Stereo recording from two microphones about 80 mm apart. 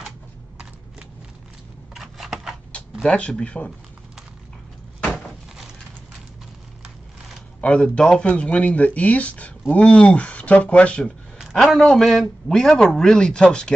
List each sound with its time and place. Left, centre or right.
2.0 s camera: centre
2.7 s speech: centre
7.6 s speech: centre
11.5 s speech: centre